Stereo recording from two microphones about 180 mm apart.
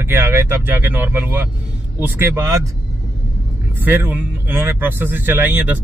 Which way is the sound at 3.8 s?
10° right (ahead or behind).